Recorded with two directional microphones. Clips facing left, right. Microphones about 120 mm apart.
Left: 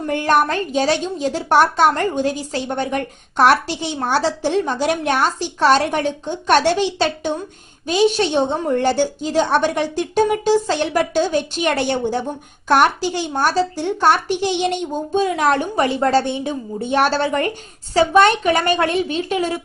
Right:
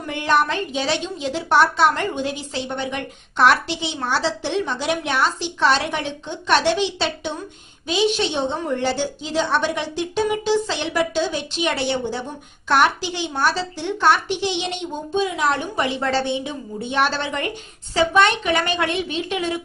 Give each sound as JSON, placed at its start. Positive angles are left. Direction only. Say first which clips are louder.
{"t": 0.1, "sound": "a woman's voice", "louder": "left 3 dB", "side_deg": 45}